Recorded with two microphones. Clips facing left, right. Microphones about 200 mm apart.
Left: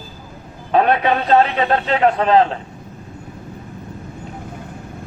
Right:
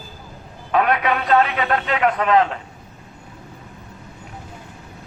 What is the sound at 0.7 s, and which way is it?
A man's voice, 30° left (ahead or behind).